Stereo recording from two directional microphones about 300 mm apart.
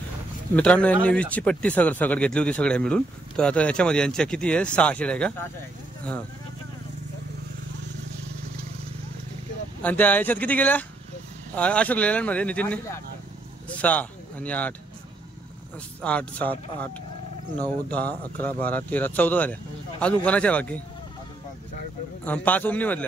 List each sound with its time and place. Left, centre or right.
0.6 s speech: centre
9.8 s a man's voice: centre
16.0 s speech: centre
18.4 s speech: centre
22.2 s speech: centre